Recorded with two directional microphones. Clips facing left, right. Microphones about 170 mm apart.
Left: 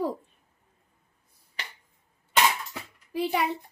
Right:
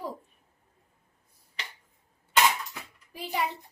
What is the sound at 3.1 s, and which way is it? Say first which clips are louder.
Speech: left 6 dB; 70° left (ahead or behind).